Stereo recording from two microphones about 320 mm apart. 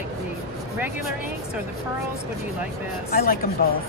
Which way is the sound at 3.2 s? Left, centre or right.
Left.